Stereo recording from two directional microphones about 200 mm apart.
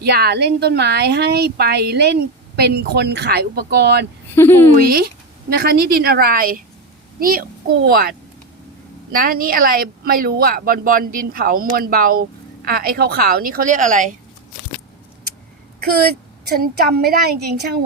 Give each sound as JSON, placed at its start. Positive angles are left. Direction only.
{"t": 0.0, "sound": "a woman's voice", "side_deg": -55}
{"t": 4.4, "sound": "speech", "side_deg": 10}
{"t": 4.8, "sound": "a woman's voice", "side_deg": -50}
{"t": 9.1, "sound": "a woman's voice", "side_deg": -45}
{"t": 16.5, "sound": "a woman's voice", "side_deg": -50}